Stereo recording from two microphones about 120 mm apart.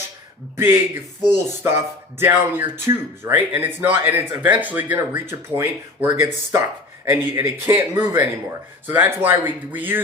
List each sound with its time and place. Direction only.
0.5 s speech: 20° right (ahead or behind)